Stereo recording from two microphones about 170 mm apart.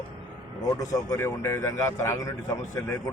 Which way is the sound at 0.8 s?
20° left (ahead or behind).